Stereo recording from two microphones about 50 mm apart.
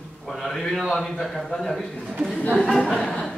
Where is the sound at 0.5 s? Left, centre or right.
Centre.